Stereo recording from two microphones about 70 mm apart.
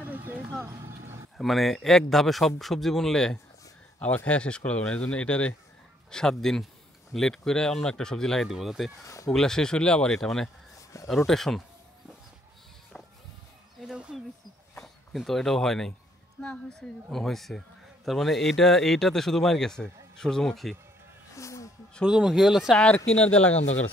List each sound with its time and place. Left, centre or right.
0.0 s a sound: right
0.8 s a sound: right
1.4 s speech: centre
4.0 s speech: left
8.5 s speech: centre
9.0 s speech: left
9.3 s speech: centre
13.8 s a sound: centre
14.8 s speech: centre
21.4 s a sound: left
22.0 s speech: centre
22.8 s speech: centre